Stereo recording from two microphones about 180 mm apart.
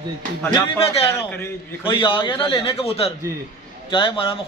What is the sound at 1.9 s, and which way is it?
A man's voice, 30° left (ahead or behind).